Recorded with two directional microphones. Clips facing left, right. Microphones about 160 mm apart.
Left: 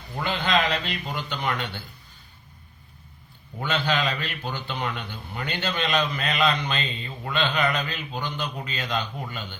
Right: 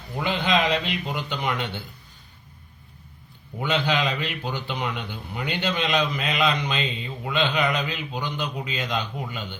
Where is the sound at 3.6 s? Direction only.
15° right (ahead or behind).